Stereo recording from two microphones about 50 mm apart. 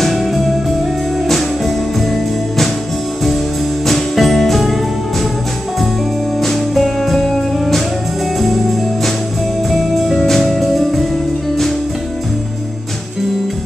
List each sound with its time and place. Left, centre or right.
0.0 s music: centre
3.8 s music: centre
6.4 s music: centre
9.7 s music: centre